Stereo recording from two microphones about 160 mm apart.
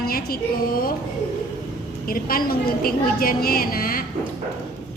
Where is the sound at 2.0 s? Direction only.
65° left (ahead or behind).